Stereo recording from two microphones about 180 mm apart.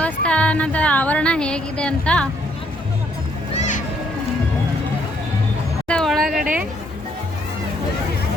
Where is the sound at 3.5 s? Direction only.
40° left (ahead or behind).